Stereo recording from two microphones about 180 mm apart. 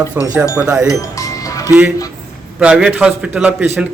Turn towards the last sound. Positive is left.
turn(degrees=-5)  # may be behind; listen again after turning